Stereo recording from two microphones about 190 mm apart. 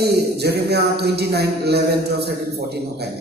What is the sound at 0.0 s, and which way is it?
Speech, 60° right (ahead or behind).